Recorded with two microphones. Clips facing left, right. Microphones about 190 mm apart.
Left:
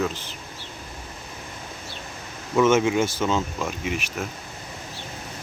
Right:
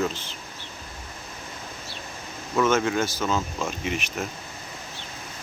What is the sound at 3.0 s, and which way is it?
Speech, 20° left (ahead or behind).